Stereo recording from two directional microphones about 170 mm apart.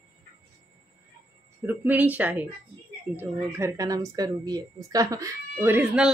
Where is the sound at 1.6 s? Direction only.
10° right (ahead or behind).